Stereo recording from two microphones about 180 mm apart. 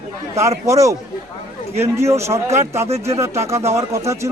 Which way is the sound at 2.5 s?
40° right (ahead or behind).